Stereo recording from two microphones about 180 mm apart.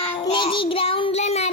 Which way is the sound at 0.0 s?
30° left (ahead or behind).